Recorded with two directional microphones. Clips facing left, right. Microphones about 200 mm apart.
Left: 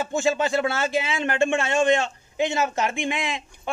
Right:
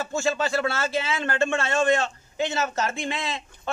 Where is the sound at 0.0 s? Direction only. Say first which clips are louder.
Left 3 dB; 20° left (ahead or behind).